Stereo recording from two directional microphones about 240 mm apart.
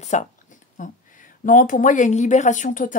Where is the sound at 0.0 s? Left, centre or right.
Left.